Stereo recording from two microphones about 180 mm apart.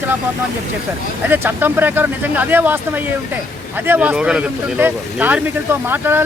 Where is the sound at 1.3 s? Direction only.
10° right (ahead or behind).